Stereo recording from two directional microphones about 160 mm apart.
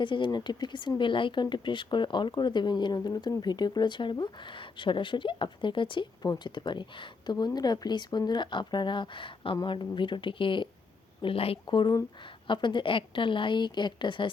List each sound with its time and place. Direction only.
0.0 s a woman's voice: 30° left (ahead or behind)